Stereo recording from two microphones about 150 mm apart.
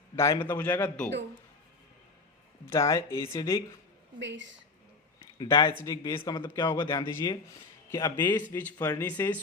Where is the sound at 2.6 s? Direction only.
20° left (ahead or behind).